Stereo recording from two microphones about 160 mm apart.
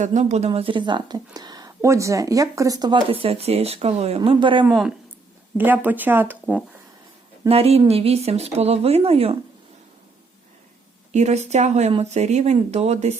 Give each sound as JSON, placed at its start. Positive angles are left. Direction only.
{"t": 0.0, "sound": "speech", "side_deg": -50}
{"t": 4.6, "sound": "speech", "side_deg": -5}
{"t": 7.4, "sound": "speech", "side_deg": -40}
{"t": 11.1, "sound": "speech", "side_deg": -45}